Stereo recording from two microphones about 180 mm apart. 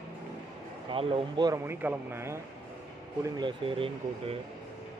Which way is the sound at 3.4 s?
30° right (ahead or behind).